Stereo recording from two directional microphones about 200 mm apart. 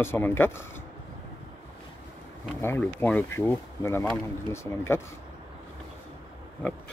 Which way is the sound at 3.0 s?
Centre (ahead or behind).